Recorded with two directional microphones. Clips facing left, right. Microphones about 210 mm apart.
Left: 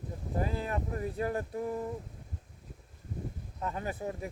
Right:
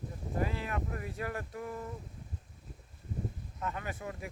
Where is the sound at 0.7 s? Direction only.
35° left (ahead or behind).